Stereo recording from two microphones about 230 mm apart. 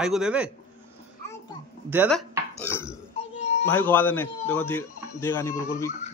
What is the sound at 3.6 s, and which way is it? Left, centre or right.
A man's voice, centre.